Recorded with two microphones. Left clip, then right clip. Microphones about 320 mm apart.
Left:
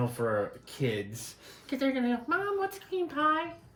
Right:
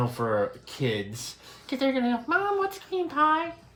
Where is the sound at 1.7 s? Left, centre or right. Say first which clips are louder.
Right 4 dB; centre.